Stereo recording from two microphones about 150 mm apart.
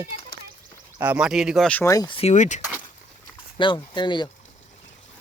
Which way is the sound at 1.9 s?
25° left (ahead or behind).